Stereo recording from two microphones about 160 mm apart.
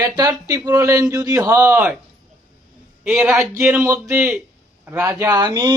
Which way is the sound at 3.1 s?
15° right (ahead or behind).